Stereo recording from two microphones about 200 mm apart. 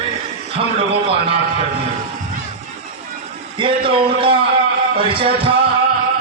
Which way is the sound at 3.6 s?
25° right (ahead or behind).